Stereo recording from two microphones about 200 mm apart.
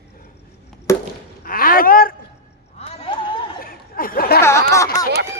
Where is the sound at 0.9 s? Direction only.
15° left (ahead or behind).